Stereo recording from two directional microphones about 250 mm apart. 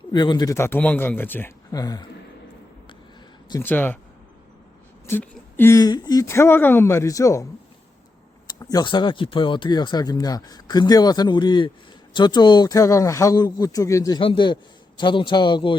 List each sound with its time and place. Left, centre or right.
0.1 s speech: centre
3.5 s speech: centre
5.0 s speech: centre
8.4 s speech: centre